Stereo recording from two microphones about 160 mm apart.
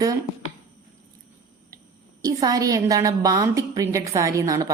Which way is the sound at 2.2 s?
25° right (ahead or behind).